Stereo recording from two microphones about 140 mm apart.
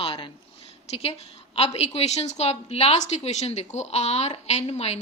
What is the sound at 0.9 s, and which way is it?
A woman's voice, 45° left (ahead or behind).